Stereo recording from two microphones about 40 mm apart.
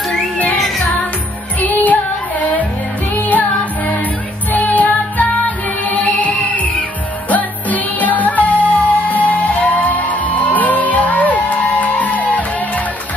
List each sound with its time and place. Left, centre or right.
1.6 s music: left
3.3 s music: left